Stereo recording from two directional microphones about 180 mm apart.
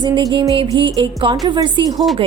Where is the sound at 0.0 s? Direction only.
25° right (ahead or behind).